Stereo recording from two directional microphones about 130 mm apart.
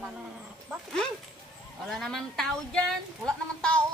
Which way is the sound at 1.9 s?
Centre (ahead or behind).